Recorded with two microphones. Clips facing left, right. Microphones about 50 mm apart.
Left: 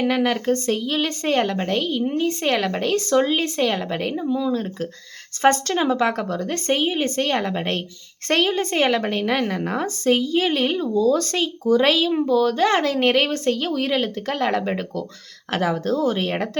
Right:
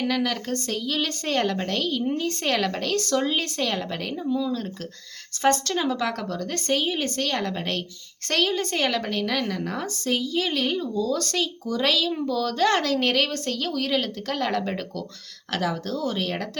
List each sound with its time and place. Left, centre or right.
0.0 s a woman's voice: left